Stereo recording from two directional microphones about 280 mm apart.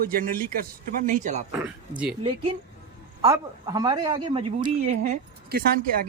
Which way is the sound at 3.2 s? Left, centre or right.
Centre.